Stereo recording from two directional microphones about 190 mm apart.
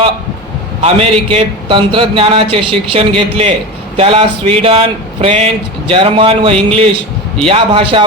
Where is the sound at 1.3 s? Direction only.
25° right (ahead or behind).